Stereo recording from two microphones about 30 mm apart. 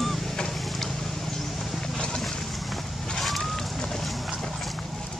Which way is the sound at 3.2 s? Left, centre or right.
Centre.